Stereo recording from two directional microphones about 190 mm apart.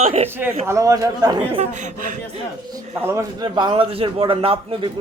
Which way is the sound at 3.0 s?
15° right (ahead or behind).